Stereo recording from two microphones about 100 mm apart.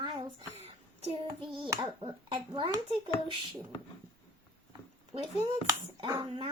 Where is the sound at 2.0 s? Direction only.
55° right (ahead or behind).